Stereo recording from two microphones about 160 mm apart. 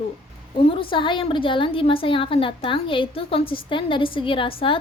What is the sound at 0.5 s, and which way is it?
A woman's voice, 35° left (ahead or behind).